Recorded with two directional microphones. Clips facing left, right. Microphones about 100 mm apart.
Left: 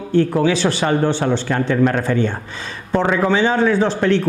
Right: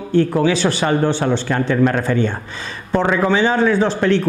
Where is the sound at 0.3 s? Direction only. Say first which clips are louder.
Even; 20° right (ahead or behind).